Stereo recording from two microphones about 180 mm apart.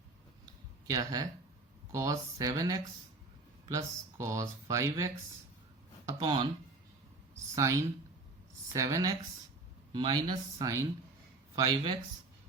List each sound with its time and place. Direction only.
0.9 s speech: 20° right (ahead or behind)
7.5 s speech: 15° right (ahead or behind)